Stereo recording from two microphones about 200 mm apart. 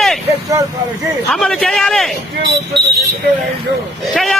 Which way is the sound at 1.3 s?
Centre (ahead or behind).